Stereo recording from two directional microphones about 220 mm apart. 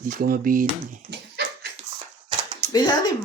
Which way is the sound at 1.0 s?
50° right (ahead or behind).